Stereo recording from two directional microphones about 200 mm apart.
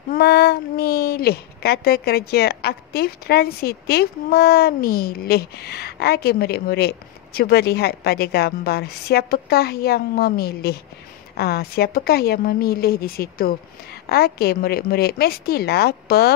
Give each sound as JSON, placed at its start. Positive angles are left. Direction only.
{"t": 0.1, "sound": "a woman's voice", "side_deg": 50}